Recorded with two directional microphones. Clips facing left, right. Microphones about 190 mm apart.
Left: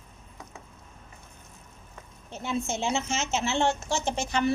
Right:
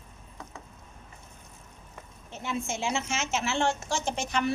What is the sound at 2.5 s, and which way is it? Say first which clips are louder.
A woman's voice: left 2 dB; 25° left (ahead or behind).